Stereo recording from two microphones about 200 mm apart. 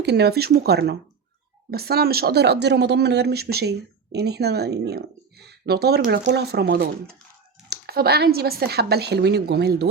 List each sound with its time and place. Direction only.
0.0 s speech: 55° right (ahead or behind)